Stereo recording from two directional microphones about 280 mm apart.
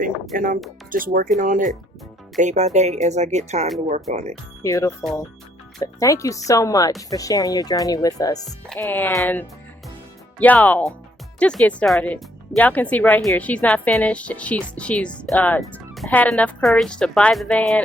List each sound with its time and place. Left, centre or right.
0.3 s speech: right
4.6 s speech: centre